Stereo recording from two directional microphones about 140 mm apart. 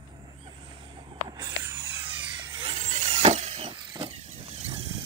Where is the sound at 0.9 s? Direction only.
30° right (ahead or behind).